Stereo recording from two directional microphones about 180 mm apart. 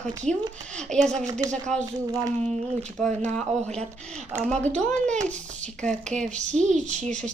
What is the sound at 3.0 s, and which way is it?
Speech, 5° left (ahead or behind).